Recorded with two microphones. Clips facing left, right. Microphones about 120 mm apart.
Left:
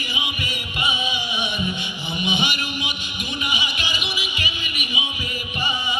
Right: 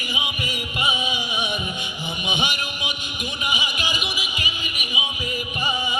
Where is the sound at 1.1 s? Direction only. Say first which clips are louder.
Even; 45° right (ahead or behind).